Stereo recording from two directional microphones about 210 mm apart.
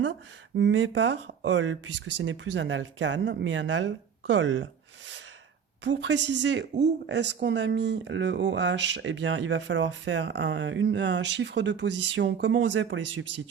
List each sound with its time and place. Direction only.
0.5 s speech: 60° right (ahead or behind)
5.8 s speech: 60° right (ahead or behind)